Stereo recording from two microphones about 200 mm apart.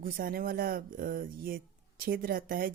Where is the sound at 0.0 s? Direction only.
45° right (ahead or behind).